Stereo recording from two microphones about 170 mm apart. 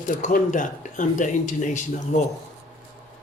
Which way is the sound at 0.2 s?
50° left (ahead or behind).